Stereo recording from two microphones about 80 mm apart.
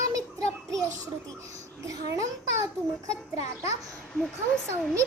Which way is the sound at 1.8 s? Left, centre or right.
Right.